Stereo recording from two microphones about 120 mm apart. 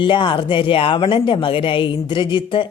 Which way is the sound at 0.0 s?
45° left (ahead or behind).